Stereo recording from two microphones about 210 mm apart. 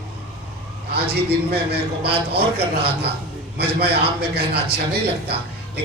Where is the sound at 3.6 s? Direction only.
50° right (ahead or behind).